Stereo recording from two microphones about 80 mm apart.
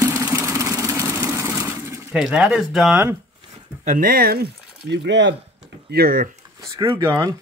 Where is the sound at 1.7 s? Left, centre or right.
Right.